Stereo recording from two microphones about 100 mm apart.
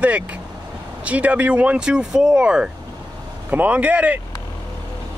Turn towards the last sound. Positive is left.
turn(degrees=-15)  # may be behind; listen again after turning